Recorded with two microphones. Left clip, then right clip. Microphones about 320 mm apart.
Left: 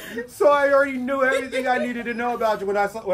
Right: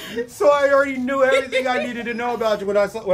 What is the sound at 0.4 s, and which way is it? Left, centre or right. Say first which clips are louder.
Speech: right 1 dB; right.